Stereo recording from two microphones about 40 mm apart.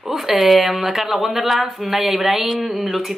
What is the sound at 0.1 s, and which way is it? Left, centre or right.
Speech, centre.